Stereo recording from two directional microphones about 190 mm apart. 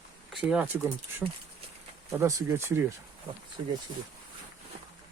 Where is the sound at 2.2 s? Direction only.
15° right (ahead or behind).